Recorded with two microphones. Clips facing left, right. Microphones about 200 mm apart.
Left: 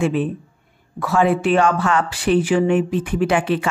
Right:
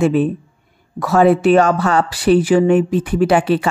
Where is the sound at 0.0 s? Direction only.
40° right (ahead or behind).